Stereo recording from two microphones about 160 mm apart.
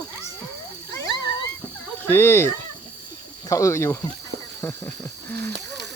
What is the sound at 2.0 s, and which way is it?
Speech, 15° left (ahead or behind).